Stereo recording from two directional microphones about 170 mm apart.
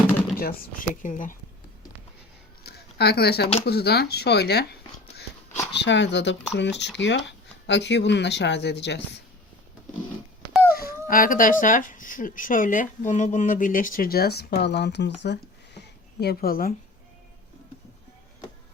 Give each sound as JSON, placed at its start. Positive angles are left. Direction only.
{"t": 0.3, "sound": "speech", "side_deg": 55}
{"t": 2.6, "sound": "a sound", "side_deg": 70}
{"t": 3.7, "sound": "speech", "side_deg": 70}
{"t": 5.7, "sound": "speech", "side_deg": 90}
{"t": 10.7, "sound": "dog", "side_deg": 60}
{"t": 11.6, "sound": "speech", "side_deg": 50}